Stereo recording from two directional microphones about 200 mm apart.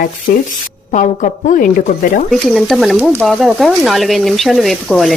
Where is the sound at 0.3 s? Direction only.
40° left (ahead or behind).